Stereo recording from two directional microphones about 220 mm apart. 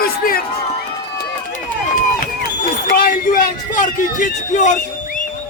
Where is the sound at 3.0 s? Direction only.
40° left (ahead or behind).